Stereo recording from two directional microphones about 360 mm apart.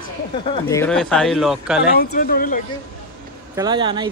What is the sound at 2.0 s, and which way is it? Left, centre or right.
Speech, left.